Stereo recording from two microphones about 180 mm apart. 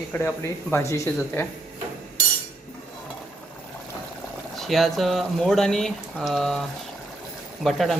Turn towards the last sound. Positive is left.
turn(degrees=0)  # may be behind; listen again after turning